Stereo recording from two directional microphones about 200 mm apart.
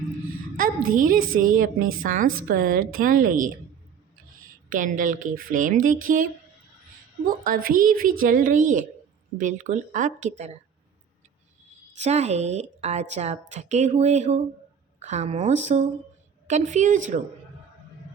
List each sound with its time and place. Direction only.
0.9 s a woman's voice: 45° right (ahead or behind)
4.7 s a woman's voice: 40° right (ahead or behind)
7.4 s a woman's voice: 45° right (ahead or behind)
11.9 s a woman's voice: 35° right (ahead or behind)